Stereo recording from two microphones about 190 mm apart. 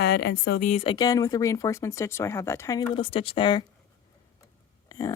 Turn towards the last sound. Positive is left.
turn(degrees=20)  # may be behind; listen again after turning